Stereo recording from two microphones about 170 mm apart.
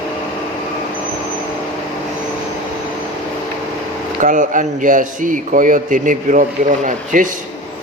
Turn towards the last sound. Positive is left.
turn(degrees=-50)  # may be behind; listen again after turning